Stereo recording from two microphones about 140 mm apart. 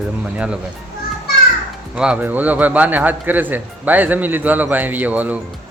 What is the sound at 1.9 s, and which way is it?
A man's voice, 5° right (ahead or behind).